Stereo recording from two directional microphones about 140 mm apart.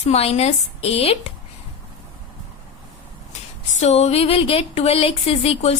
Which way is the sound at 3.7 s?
50° left (ahead or behind).